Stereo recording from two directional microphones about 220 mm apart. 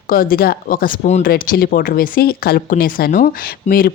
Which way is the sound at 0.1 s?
40° left (ahead or behind).